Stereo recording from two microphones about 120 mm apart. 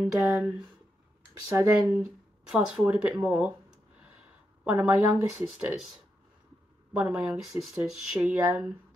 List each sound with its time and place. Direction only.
0.3 s speech: 10° right (ahead or behind)
1.5 s speech: 25° right (ahead or behind)
1.8 s speech: 10° right (ahead or behind)
4.6 s speech: 10° right (ahead or behind)
6.9 s speech: 5° right (ahead or behind)